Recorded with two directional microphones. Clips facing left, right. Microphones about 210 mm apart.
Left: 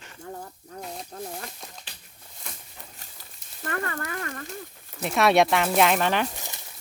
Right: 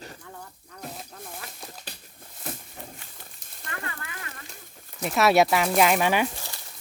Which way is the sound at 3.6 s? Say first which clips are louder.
Left 7 dB; 50° left (ahead or behind).